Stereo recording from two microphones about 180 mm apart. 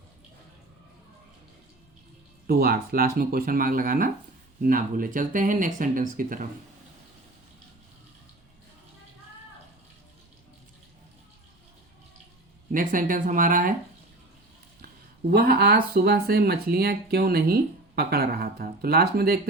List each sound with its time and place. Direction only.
2.5 s speech: 55° right (ahead or behind)
12.7 s speech: 50° right (ahead or behind)
14.8 s speech: 55° right (ahead or behind)